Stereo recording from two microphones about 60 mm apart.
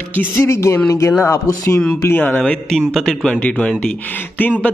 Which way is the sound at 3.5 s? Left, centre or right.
Centre.